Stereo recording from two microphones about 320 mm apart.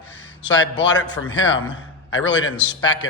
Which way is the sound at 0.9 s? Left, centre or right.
Left.